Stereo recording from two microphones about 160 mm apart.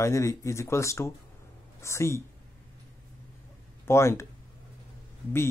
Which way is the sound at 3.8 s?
15° left (ahead or behind).